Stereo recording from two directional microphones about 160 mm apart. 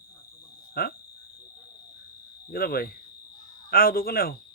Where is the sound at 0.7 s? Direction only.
70° left (ahead or behind).